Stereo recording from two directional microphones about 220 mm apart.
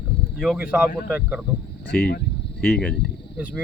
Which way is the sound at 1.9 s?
40° left (ahead or behind).